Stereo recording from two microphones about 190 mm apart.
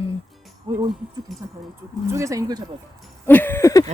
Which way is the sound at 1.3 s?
Centre (ahead or behind).